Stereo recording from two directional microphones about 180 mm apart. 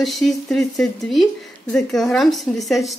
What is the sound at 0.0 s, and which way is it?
A woman's voice, centre (ahead or behind).